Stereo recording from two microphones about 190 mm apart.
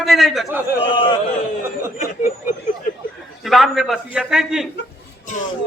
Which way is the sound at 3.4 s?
Centre (ahead or behind).